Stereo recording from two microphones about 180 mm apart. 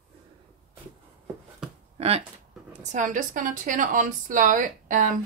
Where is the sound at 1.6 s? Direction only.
5° right (ahead or behind).